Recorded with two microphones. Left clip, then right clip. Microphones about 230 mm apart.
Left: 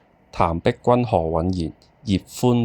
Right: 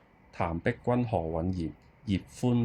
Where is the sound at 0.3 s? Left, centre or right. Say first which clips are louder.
Left 11 dB; left.